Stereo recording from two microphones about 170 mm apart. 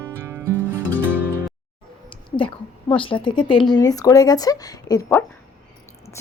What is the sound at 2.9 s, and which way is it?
Speech, 30° left (ahead or behind).